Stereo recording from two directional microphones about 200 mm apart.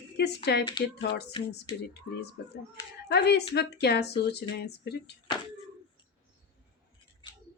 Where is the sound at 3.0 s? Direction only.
55° left (ahead or behind).